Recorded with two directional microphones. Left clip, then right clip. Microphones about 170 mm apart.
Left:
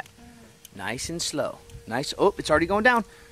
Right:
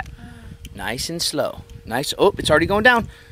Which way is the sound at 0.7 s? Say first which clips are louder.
Right 5 dB; 30° right (ahead or behind).